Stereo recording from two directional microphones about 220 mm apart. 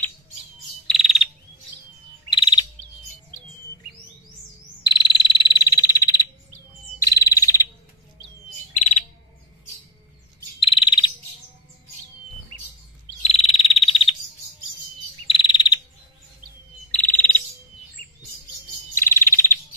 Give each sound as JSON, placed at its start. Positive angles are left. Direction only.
{"t": 0.8, "sound": "frog", "side_deg": 0}
{"t": 2.3, "sound": "chirp", "side_deg": 20}
{"t": 4.8, "sound": "frog", "side_deg": 20}
{"t": 8.7, "sound": "bird", "side_deg": 35}
{"t": 10.6, "sound": "frog", "side_deg": 20}
{"t": 13.2, "sound": "frog", "side_deg": 25}
{"t": 15.2, "sound": "chirp", "side_deg": 25}
{"t": 16.9, "sound": "bird", "side_deg": 5}
{"t": 18.9, "sound": "bird", "side_deg": 10}